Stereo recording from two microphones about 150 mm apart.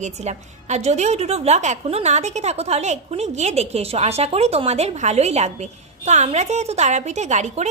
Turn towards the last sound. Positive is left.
turn(degrees=-50)  # may be behind; listen again after turning